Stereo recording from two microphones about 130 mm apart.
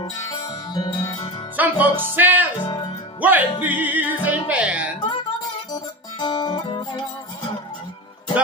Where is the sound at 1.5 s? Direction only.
15° right (ahead or behind).